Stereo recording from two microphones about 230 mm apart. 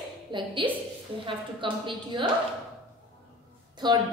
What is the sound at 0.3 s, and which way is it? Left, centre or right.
A woman's voice, right.